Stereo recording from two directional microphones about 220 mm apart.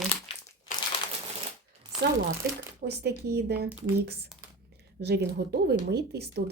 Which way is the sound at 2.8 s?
50° right (ahead or behind).